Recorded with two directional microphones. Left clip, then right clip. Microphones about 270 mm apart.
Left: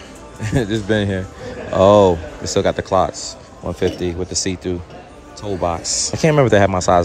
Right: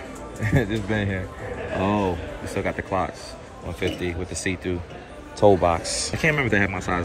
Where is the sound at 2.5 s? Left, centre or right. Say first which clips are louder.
Left 10 dB; centre.